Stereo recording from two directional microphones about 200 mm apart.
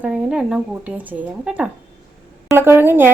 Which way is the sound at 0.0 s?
5° right (ahead or behind).